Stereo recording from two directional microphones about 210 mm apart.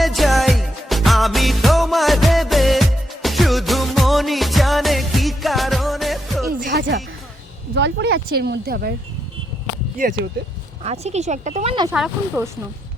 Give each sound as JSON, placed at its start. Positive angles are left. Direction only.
{"t": 0.0, "sound": "music", "side_deg": 0}
{"t": 6.5, "sound": "music", "side_deg": -50}
{"t": 7.7, "sound": "speech", "side_deg": -55}
{"t": 10.0, "sound": "speech", "side_deg": -45}
{"t": 10.8, "sound": "speech", "side_deg": -30}
{"t": 11.9, "sound": "speech", "side_deg": -5}